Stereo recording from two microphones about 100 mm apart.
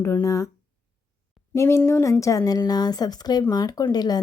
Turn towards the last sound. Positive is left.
turn(degrees=40)  # may be behind; listen again after turning